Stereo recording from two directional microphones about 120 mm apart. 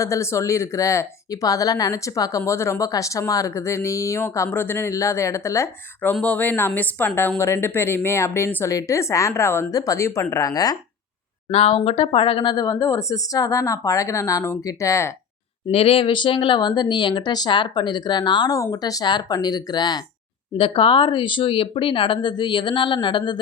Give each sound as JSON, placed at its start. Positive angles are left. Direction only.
{"t": 0.0, "sound": "speech", "side_deg": 25}
{"t": 11.5, "sound": "speech", "side_deg": 55}
{"t": 15.7, "sound": "speech", "side_deg": 55}
{"t": 20.6, "sound": "speech", "side_deg": 50}